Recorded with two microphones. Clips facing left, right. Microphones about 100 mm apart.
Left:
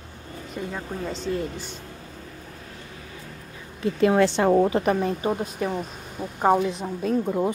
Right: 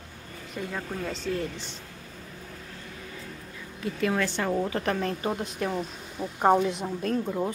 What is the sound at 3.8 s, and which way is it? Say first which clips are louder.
Speech: left 8 dB; 25° left (ahead or behind).